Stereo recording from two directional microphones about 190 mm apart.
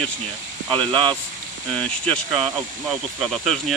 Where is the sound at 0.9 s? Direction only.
25° right (ahead or behind).